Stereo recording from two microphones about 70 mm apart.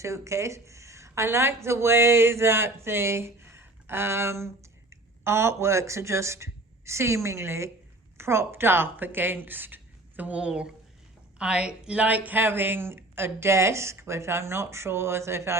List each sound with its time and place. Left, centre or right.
0.0 s a woman's voice: right